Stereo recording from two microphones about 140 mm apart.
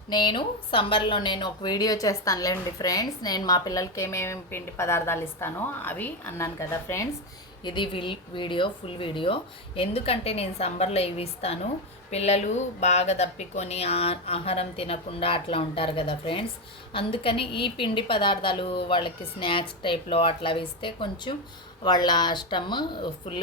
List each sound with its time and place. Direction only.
0.1 s speech: 30° left (ahead or behind)
7.6 s a woman's voice: 35° left (ahead or behind)